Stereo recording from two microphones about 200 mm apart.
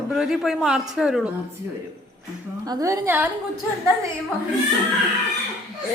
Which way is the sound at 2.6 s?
15° right (ahead or behind).